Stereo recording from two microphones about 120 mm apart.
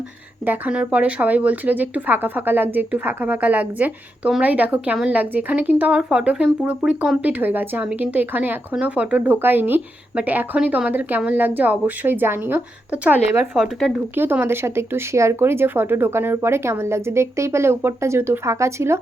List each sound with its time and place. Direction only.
0.4 s speech: 15° right (ahead or behind)
13.5 s speech: centre (ahead or behind)
14.2 s speech: 15° right (ahead or behind)